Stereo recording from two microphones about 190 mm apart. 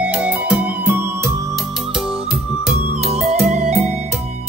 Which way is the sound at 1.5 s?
Centre (ahead or behind).